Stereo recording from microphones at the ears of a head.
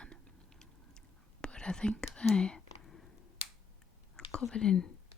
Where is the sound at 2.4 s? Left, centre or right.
Left.